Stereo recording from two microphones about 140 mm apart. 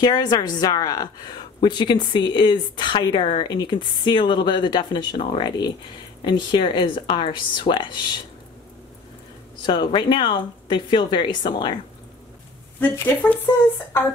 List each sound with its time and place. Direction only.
0.0 s a woman's voice: 30° left (ahead or behind)
9.6 s a woman's voice: 35° left (ahead or behind)
12.9 s speech: 15° left (ahead or behind)